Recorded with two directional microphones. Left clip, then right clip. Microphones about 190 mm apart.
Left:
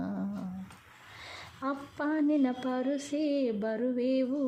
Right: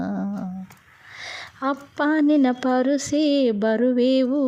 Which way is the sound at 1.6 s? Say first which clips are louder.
Right 10 dB; 30° right (ahead or behind).